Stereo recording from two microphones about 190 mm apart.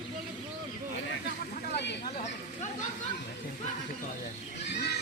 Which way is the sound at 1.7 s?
65° left (ahead or behind).